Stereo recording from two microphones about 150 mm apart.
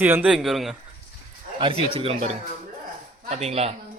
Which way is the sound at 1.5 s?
35° right (ahead or behind).